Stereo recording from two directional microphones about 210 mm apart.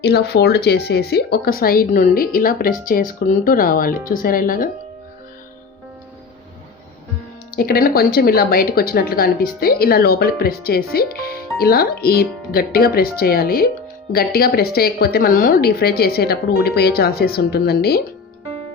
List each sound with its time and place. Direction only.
0.0 s speech: 50° left (ahead or behind)
7.5 s speech: 45° left (ahead or behind)